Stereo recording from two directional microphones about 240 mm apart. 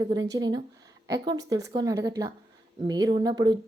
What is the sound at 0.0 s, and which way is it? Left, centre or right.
A woman's voice, centre.